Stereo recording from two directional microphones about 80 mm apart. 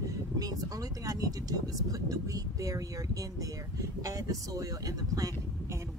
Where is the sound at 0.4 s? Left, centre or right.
Right.